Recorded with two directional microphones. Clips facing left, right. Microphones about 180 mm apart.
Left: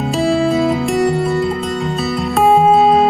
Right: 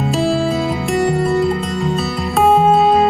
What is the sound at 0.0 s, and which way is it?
Music, centre (ahead or behind).